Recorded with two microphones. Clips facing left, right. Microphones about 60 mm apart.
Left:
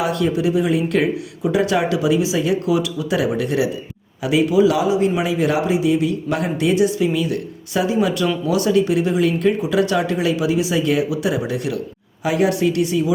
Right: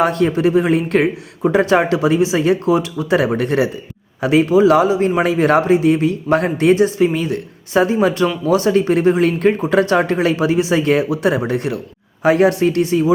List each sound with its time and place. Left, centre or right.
0.0 s speech: right